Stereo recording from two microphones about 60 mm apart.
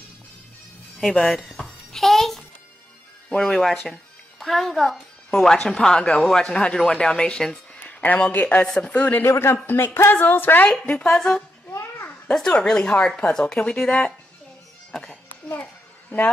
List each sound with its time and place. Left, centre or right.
1.1 s a sound: centre
3.3 s music: centre
3.5 s a child's voice: centre
8.3 s speech: left
8.6 s speech: centre
8.9 s speech: left
9.2 s speech: left
10.9 s a child's voice: centre
15.5 s a sound: left